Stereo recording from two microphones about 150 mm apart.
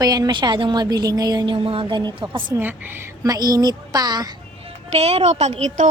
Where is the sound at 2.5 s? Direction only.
15° right (ahead or behind); by 4.7 s 30° right (ahead or behind).